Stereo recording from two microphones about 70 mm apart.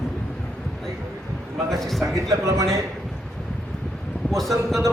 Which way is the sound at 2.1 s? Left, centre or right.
Right.